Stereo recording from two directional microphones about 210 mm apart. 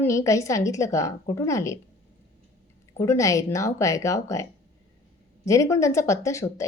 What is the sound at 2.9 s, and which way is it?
A woman's voice, 15° left (ahead or behind).